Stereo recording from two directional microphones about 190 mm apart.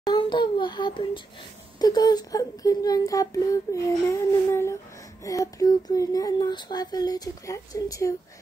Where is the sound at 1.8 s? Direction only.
20° left (ahead or behind).